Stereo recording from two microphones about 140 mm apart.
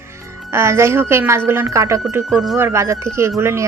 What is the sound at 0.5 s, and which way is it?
Speech, 20° right (ahead or behind).